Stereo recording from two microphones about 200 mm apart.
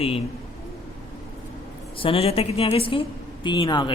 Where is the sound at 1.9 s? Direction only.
25° left (ahead or behind).